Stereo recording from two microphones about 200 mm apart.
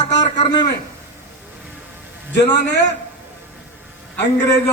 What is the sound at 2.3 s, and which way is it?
Speech, 60° left (ahead or behind).